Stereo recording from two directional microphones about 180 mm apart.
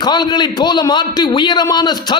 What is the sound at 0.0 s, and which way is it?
A man's voice, 25° left (ahead or behind).